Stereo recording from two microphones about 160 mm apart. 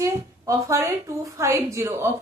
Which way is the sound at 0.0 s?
20° right (ahead or behind).